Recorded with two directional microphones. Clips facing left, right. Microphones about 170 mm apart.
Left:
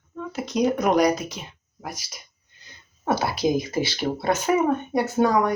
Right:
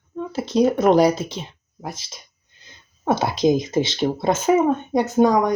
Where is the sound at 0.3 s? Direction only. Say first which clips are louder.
Right 4 dB; 30° right (ahead or behind).